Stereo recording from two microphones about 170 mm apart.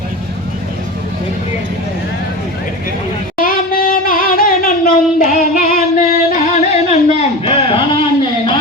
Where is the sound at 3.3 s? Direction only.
60° left (ahead or behind).